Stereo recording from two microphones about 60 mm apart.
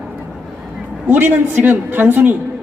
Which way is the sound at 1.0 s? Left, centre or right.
Right.